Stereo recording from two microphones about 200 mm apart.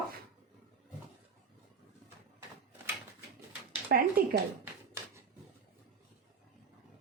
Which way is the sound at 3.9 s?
55° right (ahead or behind).